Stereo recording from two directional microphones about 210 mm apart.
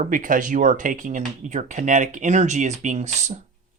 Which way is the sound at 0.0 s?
40° right (ahead or behind).